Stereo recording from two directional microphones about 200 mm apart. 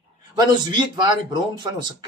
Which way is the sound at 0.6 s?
20° right (ahead or behind).